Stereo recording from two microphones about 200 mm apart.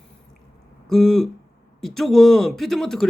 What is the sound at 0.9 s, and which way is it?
Speech, centre (ahead or behind).